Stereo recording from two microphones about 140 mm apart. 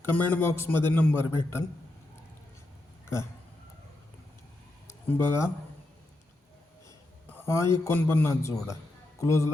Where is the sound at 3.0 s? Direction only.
20° left (ahead or behind).